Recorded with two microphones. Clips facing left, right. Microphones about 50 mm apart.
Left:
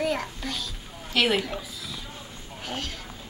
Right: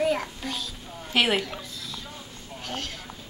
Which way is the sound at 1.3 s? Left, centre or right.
Centre.